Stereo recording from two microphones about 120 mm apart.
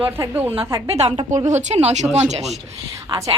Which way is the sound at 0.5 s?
50° right (ahead or behind).